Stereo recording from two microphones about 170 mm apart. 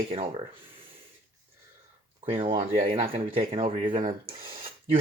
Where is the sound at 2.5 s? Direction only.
30° right (ahead or behind).